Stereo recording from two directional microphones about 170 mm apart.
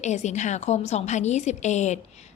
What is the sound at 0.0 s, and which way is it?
A woman's voice, 45° left (ahead or behind).